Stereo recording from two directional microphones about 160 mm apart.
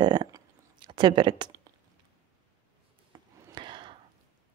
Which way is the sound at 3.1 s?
25° right (ahead or behind).